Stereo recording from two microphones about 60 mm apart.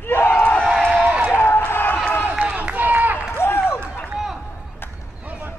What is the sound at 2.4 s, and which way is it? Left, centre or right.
Run, right.